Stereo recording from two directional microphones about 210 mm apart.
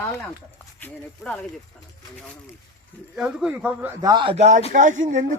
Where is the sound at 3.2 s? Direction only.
5° right (ahead or behind).